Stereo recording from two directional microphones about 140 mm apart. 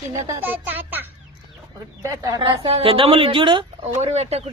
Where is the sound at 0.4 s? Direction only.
15° right (ahead or behind).